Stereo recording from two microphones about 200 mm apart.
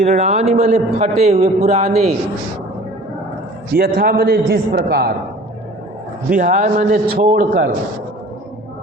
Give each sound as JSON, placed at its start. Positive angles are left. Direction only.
{"t": 0.0, "sound": "a man's voice", "side_deg": -35}
{"t": 3.8, "sound": "a man's voice", "side_deg": -50}
{"t": 6.3, "sound": "a man's voice", "side_deg": -40}